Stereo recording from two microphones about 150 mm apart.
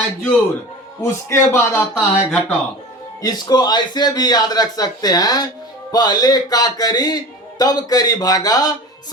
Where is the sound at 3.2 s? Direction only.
25° left (ahead or behind).